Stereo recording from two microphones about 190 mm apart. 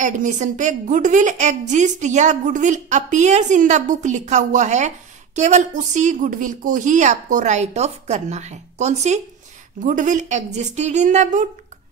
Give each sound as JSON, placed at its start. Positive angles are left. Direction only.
{"t": 0.0, "sound": "a woman's voice", "side_deg": -40}